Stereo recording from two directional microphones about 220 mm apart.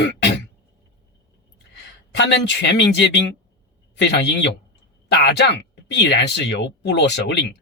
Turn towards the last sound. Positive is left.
turn(degrees=50)  # may be behind; listen again after turning